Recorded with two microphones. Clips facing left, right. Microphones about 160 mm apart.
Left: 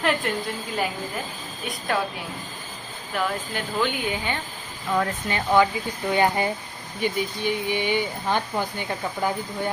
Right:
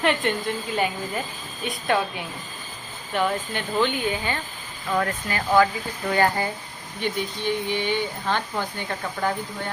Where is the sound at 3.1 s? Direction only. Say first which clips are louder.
Right 2 dB; 5° left (ahead or behind).